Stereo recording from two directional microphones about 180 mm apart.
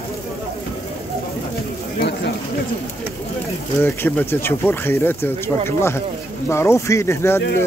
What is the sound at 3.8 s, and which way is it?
Speech, 10° left (ahead or behind).